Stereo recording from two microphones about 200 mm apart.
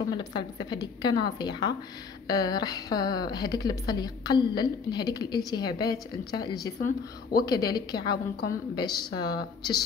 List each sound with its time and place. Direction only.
0.1 s a woman's voice: 20° left (ahead or behind)